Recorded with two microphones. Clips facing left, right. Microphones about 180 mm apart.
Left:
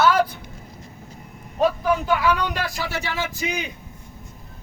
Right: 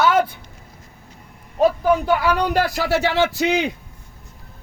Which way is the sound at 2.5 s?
65° right (ahead or behind).